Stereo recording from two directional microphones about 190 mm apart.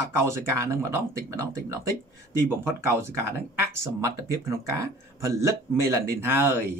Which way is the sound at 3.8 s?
15° right (ahead or behind).